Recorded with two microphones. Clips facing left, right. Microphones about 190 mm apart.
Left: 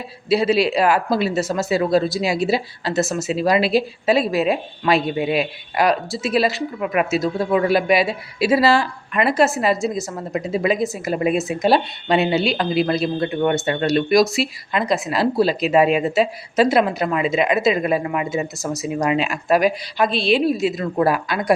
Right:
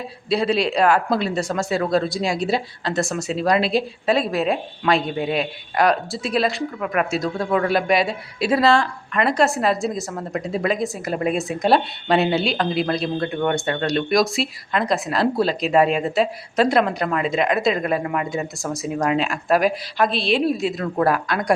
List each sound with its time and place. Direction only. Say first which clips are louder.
0.3 s speech: left 3 dB; 5° left (ahead or behind)